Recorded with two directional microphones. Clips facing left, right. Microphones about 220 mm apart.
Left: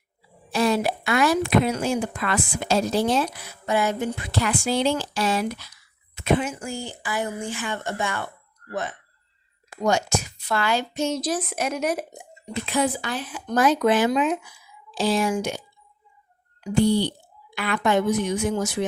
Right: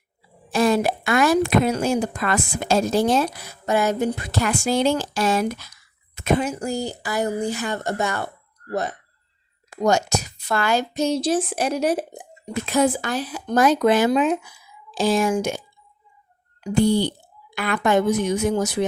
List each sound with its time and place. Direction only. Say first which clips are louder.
0.5 s a woman's voice: right 3 dB; 45° right (ahead or behind); by 12.2 s 30° right (ahead or behind)
12.6 s a woman's voice: right 4 dB; 45° right (ahead or behind)
16.7 s a woman's voice: right 1 dB; 45° right (ahead or behind)